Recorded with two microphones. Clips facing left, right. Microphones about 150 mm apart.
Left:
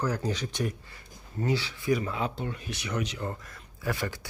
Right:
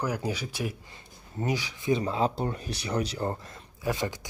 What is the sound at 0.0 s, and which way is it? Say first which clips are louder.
Speech: left 1 dB; 10° right (ahead or behind).